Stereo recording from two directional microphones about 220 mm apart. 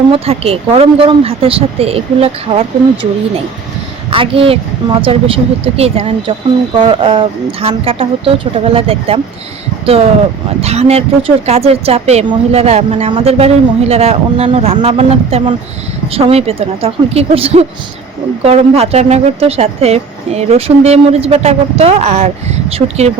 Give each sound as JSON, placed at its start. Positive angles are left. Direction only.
{"t": 0.1, "sound": "a woman's voice", "side_deg": -25}
{"t": 4.1, "sound": "a woman's voice", "side_deg": -25}